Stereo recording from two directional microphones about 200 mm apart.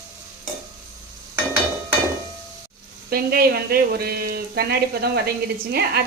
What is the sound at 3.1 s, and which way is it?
Speech, 50° right (ahead or behind).